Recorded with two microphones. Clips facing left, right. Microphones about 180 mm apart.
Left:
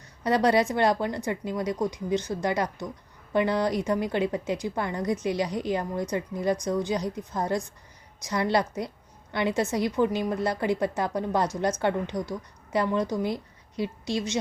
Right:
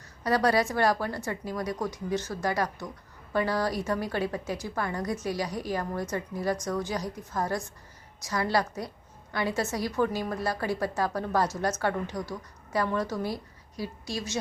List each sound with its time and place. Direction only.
0.3 s a woman's voice: 20° left (ahead or behind)